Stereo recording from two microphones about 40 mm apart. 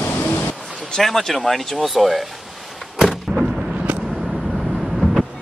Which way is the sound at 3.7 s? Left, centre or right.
Right.